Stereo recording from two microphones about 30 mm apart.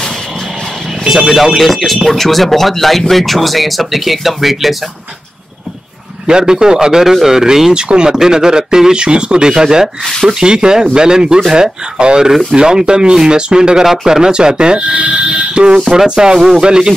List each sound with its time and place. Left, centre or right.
1.1 s speech: centre
6.2 s speech: right
7.7 s speech: right
14.8 s speech: right
16.2 s speech: right